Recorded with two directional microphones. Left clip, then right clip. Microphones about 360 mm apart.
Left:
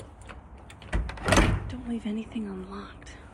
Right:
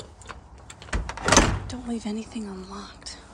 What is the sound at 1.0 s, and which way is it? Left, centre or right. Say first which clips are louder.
Door: right 5 dB; right.